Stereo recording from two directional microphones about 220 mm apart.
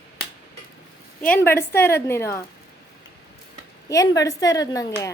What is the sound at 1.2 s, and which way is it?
Speech, 10° left (ahead or behind).